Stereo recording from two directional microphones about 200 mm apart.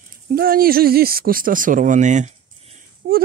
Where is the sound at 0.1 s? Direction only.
45° right (ahead or behind).